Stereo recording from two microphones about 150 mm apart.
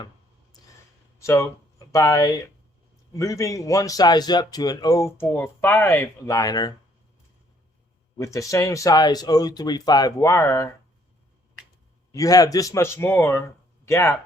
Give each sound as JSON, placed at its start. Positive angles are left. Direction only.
{"t": 1.2, "sound": "a man's voice", "side_deg": 20}
{"t": 8.2, "sound": "a man's voice", "side_deg": 20}
{"t": 12.1, "sound": "a man's voice", "side_deg": 25}